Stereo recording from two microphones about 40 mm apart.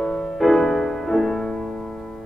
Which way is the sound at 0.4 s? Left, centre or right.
Centre.